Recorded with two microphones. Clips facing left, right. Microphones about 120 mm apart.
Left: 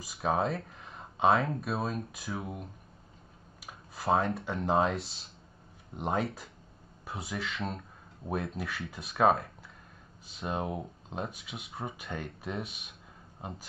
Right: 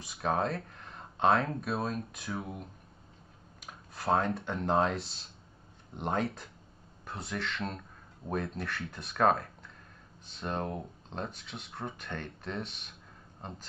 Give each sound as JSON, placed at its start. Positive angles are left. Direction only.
{"t": 0.0, "sound": "a man's voice", "side_deg": 0}